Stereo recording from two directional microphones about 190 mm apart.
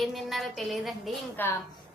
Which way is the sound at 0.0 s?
Centre (ahead or behind).